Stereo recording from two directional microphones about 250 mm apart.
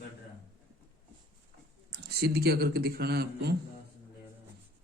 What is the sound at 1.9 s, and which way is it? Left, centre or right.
A man's voice, right.